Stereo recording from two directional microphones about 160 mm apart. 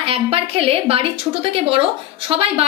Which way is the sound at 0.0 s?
40° right (ahead or behind).